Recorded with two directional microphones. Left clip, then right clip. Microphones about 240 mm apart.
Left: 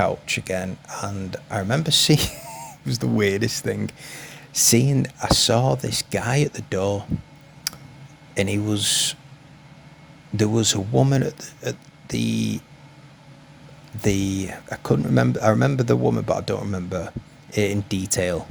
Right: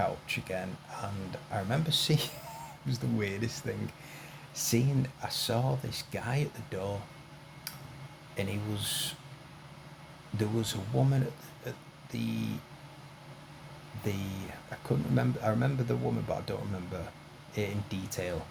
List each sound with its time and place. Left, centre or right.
0.0 s speech: left
7.7 s tick: left
8.4 s speech: left
10.3 s speech: left
14.0 s speech: left